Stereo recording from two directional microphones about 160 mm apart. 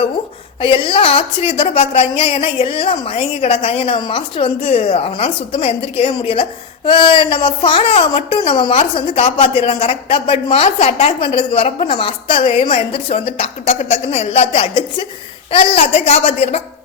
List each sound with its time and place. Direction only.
0.6 s a woman's voice: 35° left (ahead or behind)